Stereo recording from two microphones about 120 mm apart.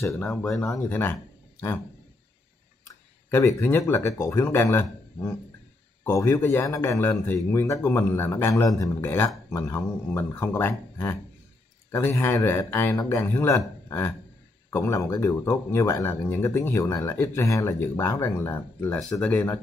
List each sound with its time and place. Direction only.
0.0 s speech: 20° left (ahead or behind)
3.3 s speech: 20° left (ahead or behind)
12.9 s speech: 35° left (ahead or behind)
13.2 s speech: 20° left (ahead or behind)
13.8 s a sound: 20° left (ahead or behind)
14.7 s speech: 25° left (ahead or behind)
18.9 s speech: 5° left (ahead or behind)